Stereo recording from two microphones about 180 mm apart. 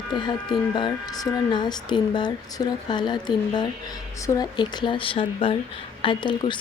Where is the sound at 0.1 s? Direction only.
25° left (ahead or behind).